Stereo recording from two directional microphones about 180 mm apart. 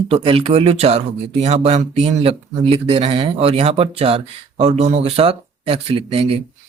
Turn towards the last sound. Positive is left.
turn(degrees=-35)  # may be behind; listen again after turning